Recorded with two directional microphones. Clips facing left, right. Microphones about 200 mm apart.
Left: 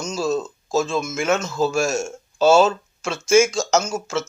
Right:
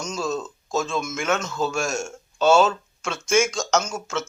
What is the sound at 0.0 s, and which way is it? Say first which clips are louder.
Speech: left 4 dB; 5° left (ahead or behind).